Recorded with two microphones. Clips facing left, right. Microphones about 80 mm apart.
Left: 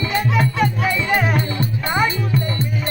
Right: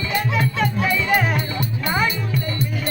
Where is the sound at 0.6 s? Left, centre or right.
Centre.